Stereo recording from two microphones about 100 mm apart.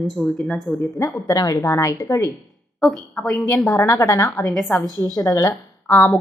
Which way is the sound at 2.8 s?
5° left (ahead or behind).